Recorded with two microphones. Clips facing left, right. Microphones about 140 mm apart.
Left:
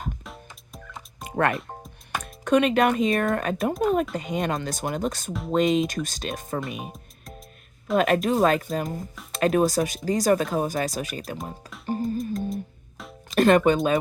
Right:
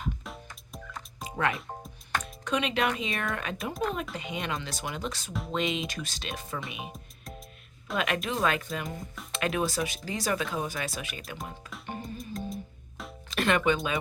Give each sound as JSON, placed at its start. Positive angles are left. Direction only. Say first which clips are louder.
{"t": 0.2, "sound": "music", "louder": "left 1 dB", "side_deg": 0}
{"t": 2.2, "sound": "speech", "louder": "left 12 dB", "side_deg": 50}
{"t": 6.9, "sound": "music", "louder": "left 1 dB", "side_deg": 0}
{"t": 7.9, "sound": "speech", "louder": "left 9 dB", "side_deg": 40}
{"t": 11.9, "sound": "music", "louder": "left 12 dB", "side_deg": 35}
{"t": 12.1, "sound": "music", "louder": "left 9 dB", "side_deg": 0}
{"t": 13.3, "sound": "speech", "louder": "left 8 dB", "side_deg": 40}